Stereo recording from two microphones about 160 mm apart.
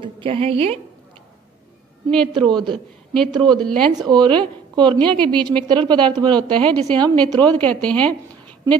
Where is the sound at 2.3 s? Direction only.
30° right (ahead or behind).